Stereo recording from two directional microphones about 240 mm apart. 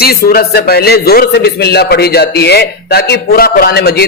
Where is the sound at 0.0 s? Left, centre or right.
Left.